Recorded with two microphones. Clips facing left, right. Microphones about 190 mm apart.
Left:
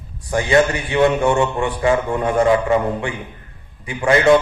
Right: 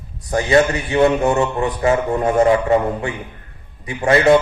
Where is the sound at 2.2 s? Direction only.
25° right (ahead or behind).